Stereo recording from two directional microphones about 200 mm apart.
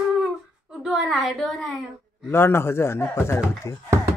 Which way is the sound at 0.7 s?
Centre (ahead or behind).